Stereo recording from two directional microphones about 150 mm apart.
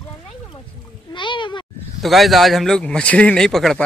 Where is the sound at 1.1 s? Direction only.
30° left (ahead or behind).